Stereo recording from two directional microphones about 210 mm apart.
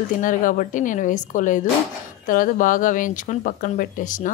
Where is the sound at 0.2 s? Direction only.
40° left (ahead or behind).